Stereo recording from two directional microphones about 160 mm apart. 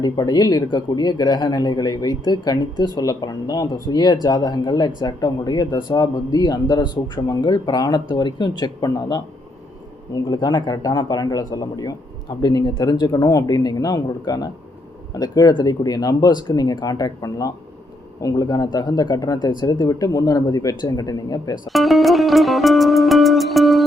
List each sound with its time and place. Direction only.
0.0 s speech: 25° left (ahead or behind)
10.2 s speech: 25° left (ahead or behind)
21.7 s music: centre (ahead or behind)